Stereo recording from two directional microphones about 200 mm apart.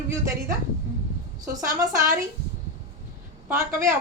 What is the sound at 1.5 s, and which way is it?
Speech, 15° right (ahead or behind).